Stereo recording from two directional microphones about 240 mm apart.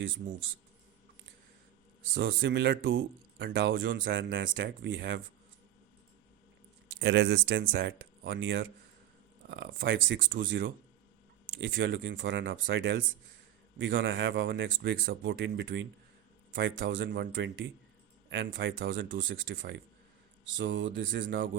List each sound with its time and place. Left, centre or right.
2.1 s speech: right
7.0 s speech: right